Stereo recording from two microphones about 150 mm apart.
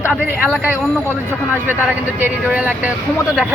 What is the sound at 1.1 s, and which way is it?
Speech, 15° left (ahead or behind).